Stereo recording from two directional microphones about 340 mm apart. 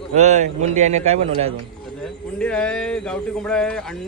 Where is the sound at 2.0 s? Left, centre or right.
Centre.